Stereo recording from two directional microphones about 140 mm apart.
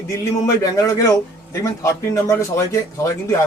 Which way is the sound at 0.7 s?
20° left (ahead or behind).